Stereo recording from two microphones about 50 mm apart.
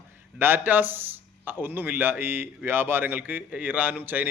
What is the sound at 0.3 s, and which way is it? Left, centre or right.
A man's voice, right.